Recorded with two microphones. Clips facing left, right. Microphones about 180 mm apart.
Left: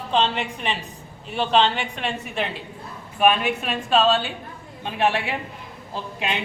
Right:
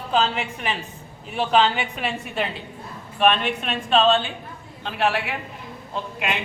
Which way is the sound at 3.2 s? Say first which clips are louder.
Left 1 dB; 10° left (ahead or behind).